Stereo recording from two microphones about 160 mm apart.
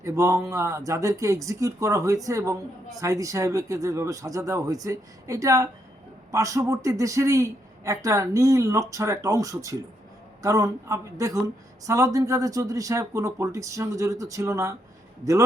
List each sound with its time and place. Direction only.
0.0 s speech: 20° right (ahead or behind)